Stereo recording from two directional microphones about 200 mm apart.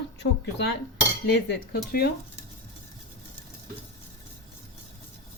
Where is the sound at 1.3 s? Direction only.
55° left (ahead or behind).